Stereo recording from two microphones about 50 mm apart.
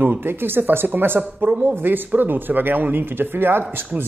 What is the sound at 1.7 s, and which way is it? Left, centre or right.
Speech, right.